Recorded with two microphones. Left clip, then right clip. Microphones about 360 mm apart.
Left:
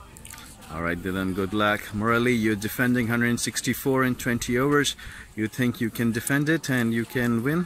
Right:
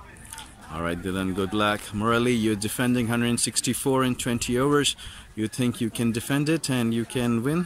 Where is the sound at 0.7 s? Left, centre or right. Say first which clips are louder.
Left 1 dB; centre.